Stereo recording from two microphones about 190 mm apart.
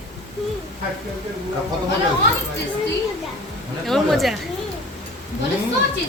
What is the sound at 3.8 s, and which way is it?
Speech, centre (ahead or behind).